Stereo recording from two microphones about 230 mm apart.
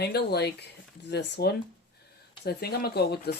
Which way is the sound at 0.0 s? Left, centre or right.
Left.